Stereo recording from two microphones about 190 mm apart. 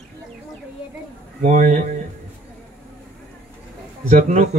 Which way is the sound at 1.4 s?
40° right (ahead or behind).